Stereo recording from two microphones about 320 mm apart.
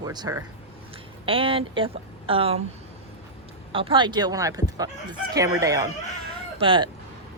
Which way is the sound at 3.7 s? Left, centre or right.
Centre.